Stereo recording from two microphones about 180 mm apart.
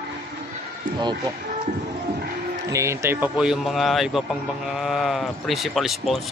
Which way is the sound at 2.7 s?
15° right (ahead or behind).